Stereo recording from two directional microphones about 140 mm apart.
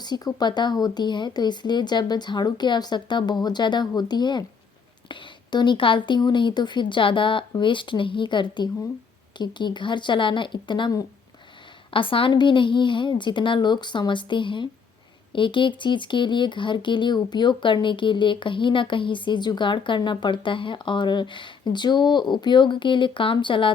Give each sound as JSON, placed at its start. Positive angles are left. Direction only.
{"t": 0.0, "sound": "speech", "side_deg": 30}